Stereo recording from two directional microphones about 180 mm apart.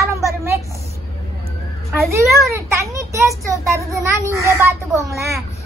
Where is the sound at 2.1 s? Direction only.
15° right (ahead or behind).